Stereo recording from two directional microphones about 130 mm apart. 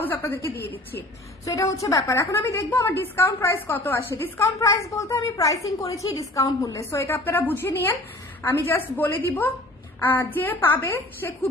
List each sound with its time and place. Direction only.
0.0 s a woman's voice: 15° left (ahead or behind)
1.4 s a woman's voice: 25° left (ahead or behind)